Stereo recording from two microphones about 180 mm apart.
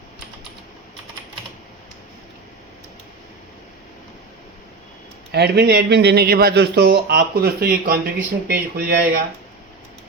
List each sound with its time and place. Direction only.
5.3 s a man's voice: 65° right (ahead or behind)